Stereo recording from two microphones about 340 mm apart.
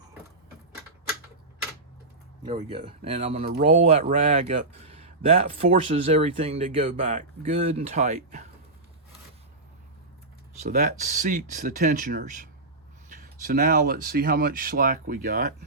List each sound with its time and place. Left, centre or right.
2.4 s speech: centre
10.6 s speech: right